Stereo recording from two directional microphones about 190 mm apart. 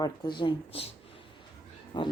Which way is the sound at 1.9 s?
25° left (ahead or behind).